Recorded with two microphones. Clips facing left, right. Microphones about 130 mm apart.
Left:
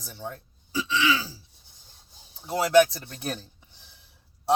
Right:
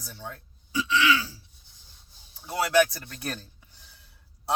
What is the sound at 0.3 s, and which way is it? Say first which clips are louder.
Speech: left 5 dB; 30° left (ahead or behind).